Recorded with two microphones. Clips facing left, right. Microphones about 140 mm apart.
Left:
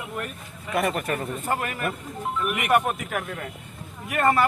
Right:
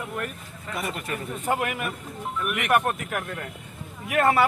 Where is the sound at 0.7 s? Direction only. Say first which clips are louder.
Left 7 dB; 60° left (ahead or behind).